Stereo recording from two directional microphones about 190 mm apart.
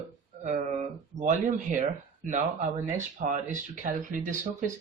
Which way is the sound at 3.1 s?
40° right (ahead or behind).